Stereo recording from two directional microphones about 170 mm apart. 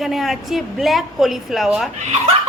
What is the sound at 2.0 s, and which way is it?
Speech, 40° right (ahead or behind).